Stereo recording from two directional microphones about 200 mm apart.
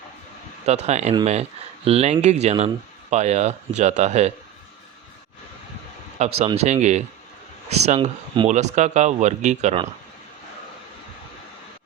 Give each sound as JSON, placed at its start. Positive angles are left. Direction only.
{"t": 0.6, "sound": "speech", "side_deg": -35}
{"t": 6.1, "sound": "speech", "side_deg": -35}